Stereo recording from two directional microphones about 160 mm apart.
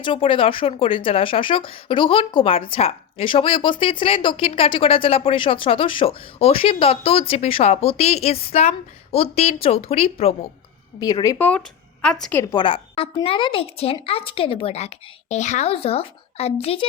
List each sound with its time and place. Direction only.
0.0 s speech: 35° left (ahead or behind)
11.0 s speech: 25° left (ahead or behind)
11.4 s a woman's voice: 5° left (ahead or behind)
12.5 s speech: 35° left (ahead or behind)